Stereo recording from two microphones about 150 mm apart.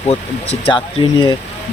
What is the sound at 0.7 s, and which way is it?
Speech, 30° left (ahead or behind).